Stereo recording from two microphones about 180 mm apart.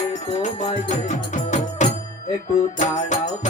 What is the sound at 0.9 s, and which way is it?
Music, 40° left (ahead or behind).